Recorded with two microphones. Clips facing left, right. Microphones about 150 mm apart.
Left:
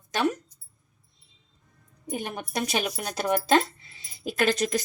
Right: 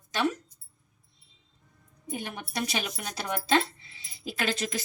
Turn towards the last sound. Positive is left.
turn(degrees=45)  # may be behind; listen again after turning